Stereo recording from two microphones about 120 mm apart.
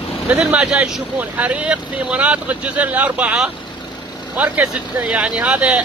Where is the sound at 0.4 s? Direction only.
10° right (ahead or behind).